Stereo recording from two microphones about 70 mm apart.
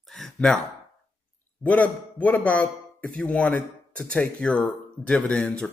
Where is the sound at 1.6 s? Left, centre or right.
Centre.